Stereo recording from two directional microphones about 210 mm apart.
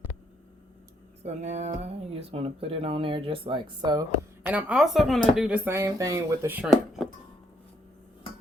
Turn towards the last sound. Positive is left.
turn(degrees=0)  # may be behind; listen again after turning